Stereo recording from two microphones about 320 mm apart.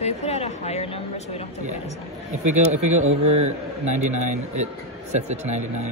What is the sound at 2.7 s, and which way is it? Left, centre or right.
A man's voice, right.